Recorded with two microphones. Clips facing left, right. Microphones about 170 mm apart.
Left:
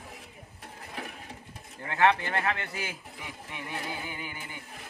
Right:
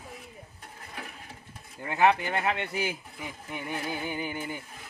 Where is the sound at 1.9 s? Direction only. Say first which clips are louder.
Right 1 dB; 10° right (ahead or behind).